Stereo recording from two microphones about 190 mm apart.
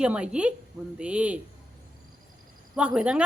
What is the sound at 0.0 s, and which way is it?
A woman's voice, 5° right (ahead or behind).